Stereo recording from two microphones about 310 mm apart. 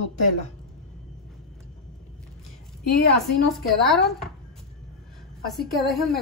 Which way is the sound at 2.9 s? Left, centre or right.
Left.